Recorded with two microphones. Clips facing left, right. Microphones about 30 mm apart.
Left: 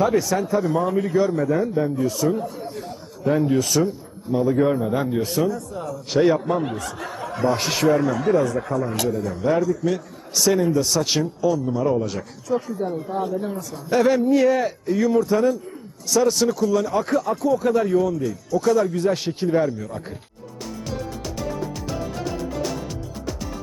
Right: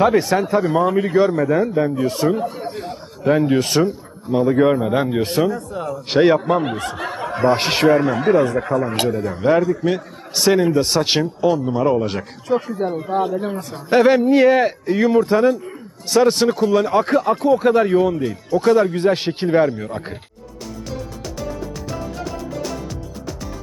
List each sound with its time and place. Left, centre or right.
0.0 s a man's voice: right
21.3 s music: centre